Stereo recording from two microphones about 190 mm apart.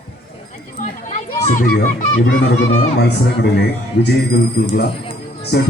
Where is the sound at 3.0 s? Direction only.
65° left (ahead or behind).